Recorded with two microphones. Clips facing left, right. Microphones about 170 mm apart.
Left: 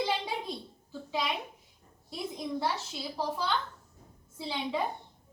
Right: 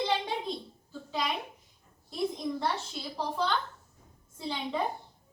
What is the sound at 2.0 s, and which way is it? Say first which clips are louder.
A child's voice: right 4 dB; 5° left (ahead or behind).